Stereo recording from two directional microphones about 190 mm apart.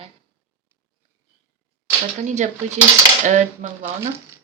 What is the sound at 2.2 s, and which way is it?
Speech, 40° right (ahead or behind).